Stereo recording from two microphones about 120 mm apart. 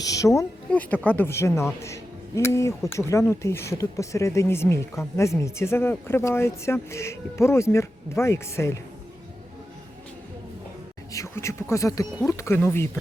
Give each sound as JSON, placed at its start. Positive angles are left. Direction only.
{"t": 0.0, "sound": "speech", "side_deg": 30}
{"t": 0.7, "sound": "speech", "side_deg": 10}
{"t": 11.1, "sound": "speech", "side_deg": 25}